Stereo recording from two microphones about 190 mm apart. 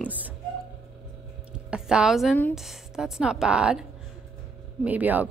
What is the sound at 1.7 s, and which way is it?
A woman's voice, 5° right (ahead or behind).